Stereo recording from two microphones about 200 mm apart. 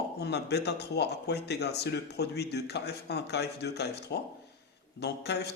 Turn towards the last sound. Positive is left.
turn(degrees=55)  # may be behind; listen again after turning